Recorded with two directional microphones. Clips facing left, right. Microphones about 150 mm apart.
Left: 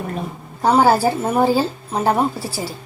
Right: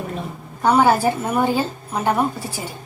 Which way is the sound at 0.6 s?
35° left (ahead or behind).